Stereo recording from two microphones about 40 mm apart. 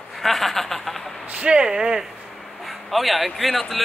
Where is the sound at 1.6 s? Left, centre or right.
Right.